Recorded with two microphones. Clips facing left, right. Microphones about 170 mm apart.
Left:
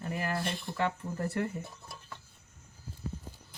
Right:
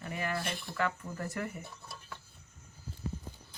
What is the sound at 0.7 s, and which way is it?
Speech, 30° left (ahead or behind).